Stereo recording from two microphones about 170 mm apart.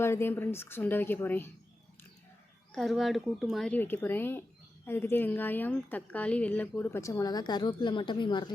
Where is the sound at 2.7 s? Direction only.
Centre (ahead or behind).